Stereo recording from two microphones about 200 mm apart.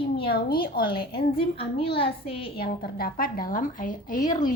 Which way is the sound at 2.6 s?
50° left (ahead or behind).